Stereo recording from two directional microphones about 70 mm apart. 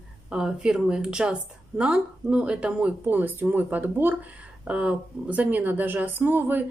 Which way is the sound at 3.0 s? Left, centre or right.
Right.